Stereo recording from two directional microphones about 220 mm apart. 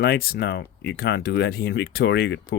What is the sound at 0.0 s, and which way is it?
Speech, 45° left (ahead or behind).